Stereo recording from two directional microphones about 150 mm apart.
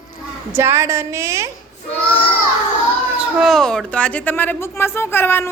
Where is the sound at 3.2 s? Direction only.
Centre (ahead or behind); by 5.5 s 15° left (ahead or behind).